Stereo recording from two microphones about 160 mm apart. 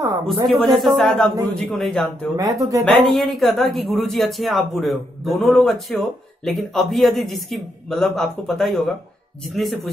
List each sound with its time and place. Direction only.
0.5 s speech: centre (ahead or behind)
2.3 s speech: 20° right (ahead or behind)
2.8 s speech: centre (ahead or behind)